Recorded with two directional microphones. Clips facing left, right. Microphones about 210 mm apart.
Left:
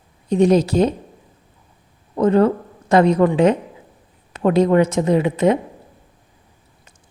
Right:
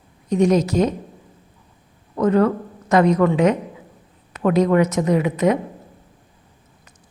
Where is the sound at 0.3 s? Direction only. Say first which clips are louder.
Left 2 dB; 30° left (ahead or behind).